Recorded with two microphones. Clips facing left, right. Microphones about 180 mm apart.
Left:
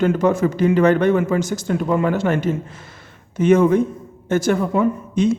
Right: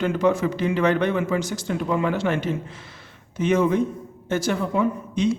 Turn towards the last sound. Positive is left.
turn(degrees=50)  # may be behind; listen again after turning